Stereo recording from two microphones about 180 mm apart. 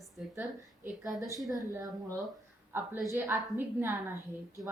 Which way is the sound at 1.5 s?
15° right (ahead or behind).